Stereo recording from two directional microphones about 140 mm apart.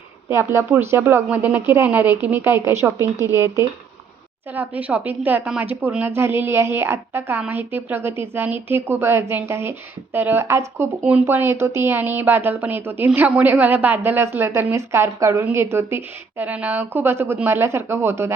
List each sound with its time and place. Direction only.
0.3 s a woman's voice: 15° right (ahead or behind)
4.5 s a woman's voice: 10° right (ahead or behind)